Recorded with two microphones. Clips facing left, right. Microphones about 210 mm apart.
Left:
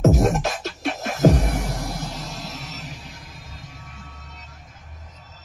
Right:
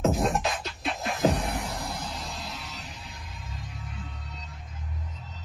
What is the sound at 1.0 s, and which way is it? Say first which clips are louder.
Music: left 7 dB; 45° left (ahead or behind).